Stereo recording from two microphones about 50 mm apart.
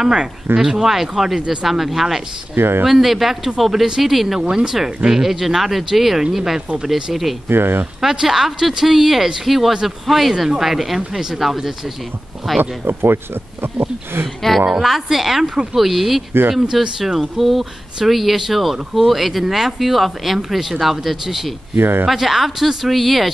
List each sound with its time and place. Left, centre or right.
0.0 s speech: centre
2.5 s speech: right
2.8 s speech: centre
4.4 s speech: centre
7.4 s speech: right
8.0 s speech: centre
12.8 s speech: right
14.2 s speech: centre
15.4 s speech: centre
15.7 s speech: centre
21.7 s speech: right
22.0 s speech: centre